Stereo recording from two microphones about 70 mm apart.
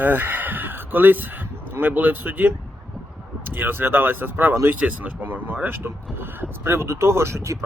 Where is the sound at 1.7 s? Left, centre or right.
Right.